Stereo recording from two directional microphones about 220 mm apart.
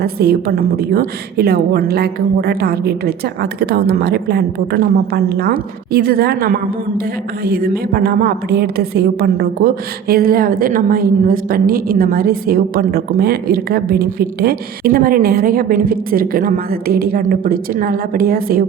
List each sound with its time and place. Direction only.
0.0 s a woman's voice: 45° right (ahead or behind)